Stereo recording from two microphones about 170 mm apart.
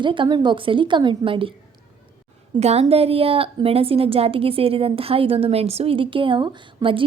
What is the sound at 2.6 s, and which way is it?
A woman's voice, 40° right (ahead or behind).